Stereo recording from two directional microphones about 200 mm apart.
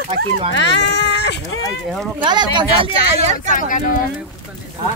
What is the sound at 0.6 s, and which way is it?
Speech, 60° left (ahead or behind).